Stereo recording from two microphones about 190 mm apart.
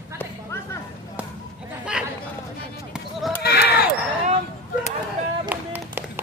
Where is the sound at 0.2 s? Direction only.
15° left (ahead or behind).